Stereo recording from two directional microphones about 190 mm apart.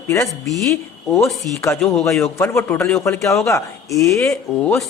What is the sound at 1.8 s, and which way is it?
Speech, 15° left (ahead or behind).